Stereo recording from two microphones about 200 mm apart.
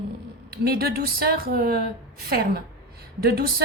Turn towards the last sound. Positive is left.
turn(degrees=-50)  # may be behind; listen again after turning